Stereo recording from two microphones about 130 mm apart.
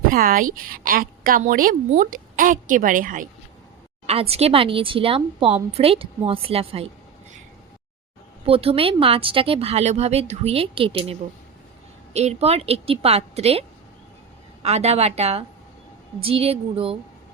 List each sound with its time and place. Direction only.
0.1 s a woman's voice: 90° right
4.0 s a woman's voice: 50° right (ahead or behind)
8.4 s a woman's voice: 45° right (ahead or behind)